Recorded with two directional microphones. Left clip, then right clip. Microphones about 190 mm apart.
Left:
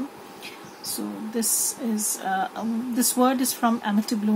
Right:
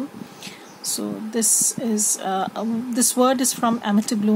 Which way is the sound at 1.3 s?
50° right (ahead or behind).